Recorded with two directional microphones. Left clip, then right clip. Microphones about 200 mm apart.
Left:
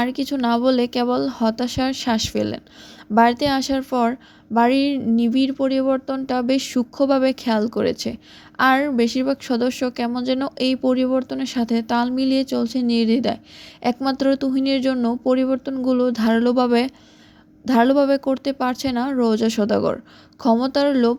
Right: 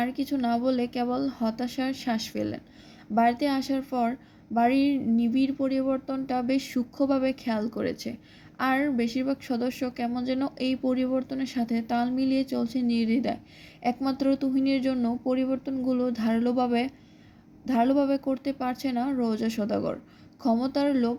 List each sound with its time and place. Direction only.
0.0 s a woman's voice: 40° left (ahead or behind)